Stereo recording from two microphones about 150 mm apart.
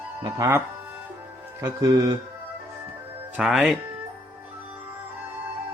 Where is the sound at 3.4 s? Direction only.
5° right (ahead or behind).